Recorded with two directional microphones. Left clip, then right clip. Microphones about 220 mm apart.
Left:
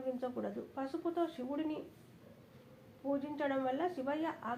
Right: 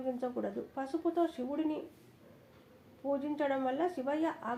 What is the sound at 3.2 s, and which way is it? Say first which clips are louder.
A woman's voice: right 3 dB; 40° right (ahead or behind).